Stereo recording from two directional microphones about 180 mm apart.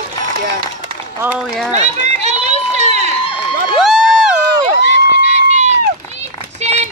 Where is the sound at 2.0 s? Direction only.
40° right (ahead or behind).